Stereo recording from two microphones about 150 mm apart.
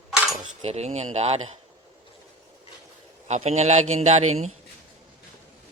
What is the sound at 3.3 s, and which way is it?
A man's voice, 45° right (ahead or behind).